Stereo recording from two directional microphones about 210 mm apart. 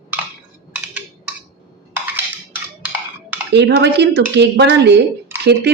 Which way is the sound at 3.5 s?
55° right (ahead or behind).